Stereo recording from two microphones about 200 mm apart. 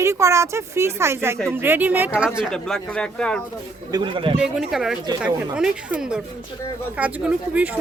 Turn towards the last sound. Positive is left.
turn(degrees=-5)  # may be behind; listen again after turning